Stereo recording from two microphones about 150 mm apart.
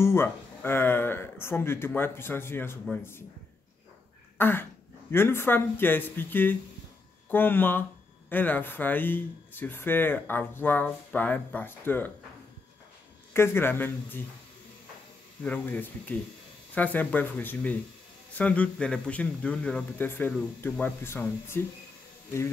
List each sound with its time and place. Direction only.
0.0 s speech: 15° left (ahead or behind)
4.4 s throat clearing: 15° left (ahead or behind)
5.1 s speech: 15° left (ahead or behind)
13.3 s speech: 15° left (ahead or behind)
15.4 s speech: 10° left (ahead or behind)